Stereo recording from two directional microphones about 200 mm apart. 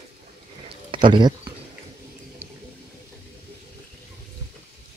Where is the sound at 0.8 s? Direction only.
25° right (ahead or behind).